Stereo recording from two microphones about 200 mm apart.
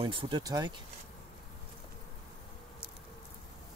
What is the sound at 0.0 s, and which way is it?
Speech, 25° right (ahead or behind).